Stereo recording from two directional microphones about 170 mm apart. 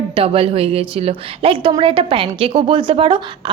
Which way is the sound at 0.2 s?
35° right (ahead or behind).